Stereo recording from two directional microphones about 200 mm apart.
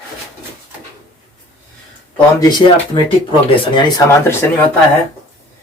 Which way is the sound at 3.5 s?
25° left (ahead or behind).